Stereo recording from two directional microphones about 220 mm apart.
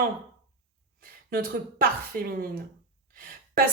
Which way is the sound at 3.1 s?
40° right (ahead or behind).